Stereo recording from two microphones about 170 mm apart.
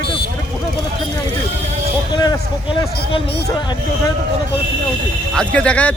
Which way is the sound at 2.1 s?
25° left (ahead or behind).